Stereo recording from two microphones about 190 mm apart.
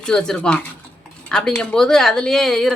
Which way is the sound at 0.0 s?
5° left (ahead or behind).